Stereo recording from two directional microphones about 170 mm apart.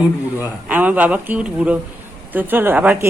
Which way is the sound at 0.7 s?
10° right (ahead or behind).